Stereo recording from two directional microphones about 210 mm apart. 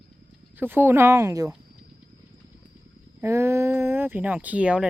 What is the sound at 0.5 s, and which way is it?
Speech, 10° right (ahead or behind).